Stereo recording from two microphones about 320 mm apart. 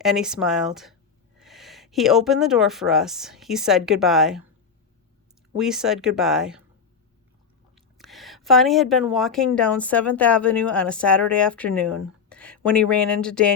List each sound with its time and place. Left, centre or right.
0.0 s a woman's voice: centre
5.5 s a woman's voice: centre
7.8 s a woman's voice: centre